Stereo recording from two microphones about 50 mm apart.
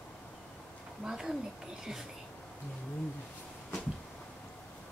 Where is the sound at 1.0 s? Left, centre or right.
Centre.